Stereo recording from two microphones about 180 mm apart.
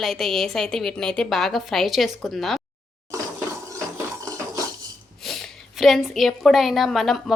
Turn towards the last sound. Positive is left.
turn(degrees=0)  # may be behind; listen again after turning